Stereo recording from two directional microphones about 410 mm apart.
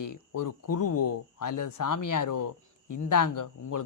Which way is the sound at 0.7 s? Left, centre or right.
Left.